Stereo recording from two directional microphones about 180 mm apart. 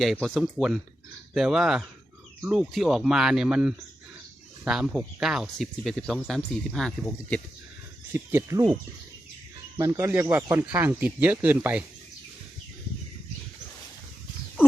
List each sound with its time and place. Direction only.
0.0 s speech: centre (ahead or behind)
8.1 s speech: 15° right (ahead or behind)
9.9 s speech: 10° right (ahead or behind)